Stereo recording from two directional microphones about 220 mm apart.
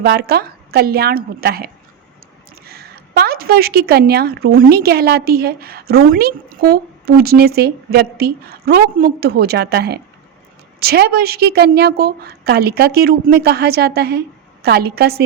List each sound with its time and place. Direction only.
0.0 s a woman's voice: 45° right (ahead or behind)